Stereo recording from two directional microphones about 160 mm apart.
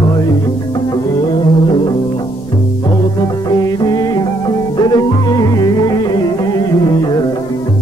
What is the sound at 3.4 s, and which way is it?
Music, 25° left (ahead or behind).